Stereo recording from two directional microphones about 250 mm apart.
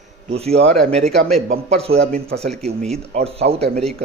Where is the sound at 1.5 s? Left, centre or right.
Right.